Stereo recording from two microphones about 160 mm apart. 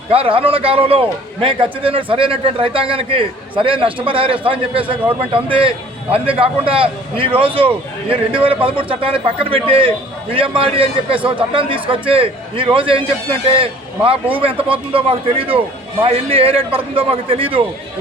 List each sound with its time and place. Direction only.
0.1 s a man's voice: 35° right (ahead or behind)